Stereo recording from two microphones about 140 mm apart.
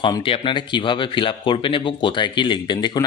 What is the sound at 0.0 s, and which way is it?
A man's voice, 35° left (ahead or behind).